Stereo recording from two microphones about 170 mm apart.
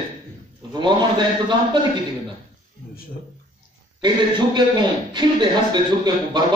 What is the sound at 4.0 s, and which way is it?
A man's voice, 25° right (ahead or behind).